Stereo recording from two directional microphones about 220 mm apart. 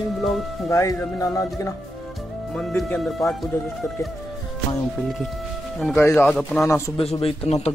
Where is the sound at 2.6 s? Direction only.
5° left (ahead or behind).